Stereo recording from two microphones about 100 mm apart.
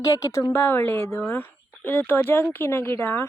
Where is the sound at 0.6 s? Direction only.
20° left (ahead or behind).